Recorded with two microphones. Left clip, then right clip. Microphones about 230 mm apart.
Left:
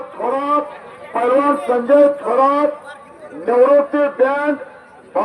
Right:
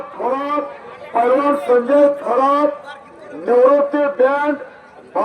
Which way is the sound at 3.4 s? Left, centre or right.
Left.